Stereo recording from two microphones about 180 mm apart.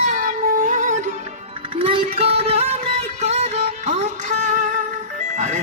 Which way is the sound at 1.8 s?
30° right (ahead or behind).